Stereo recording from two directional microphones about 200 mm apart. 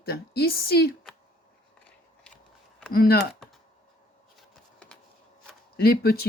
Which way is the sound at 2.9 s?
50° left (ahead or behind).